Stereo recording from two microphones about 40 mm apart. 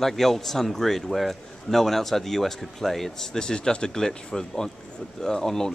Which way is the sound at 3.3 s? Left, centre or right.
Centre.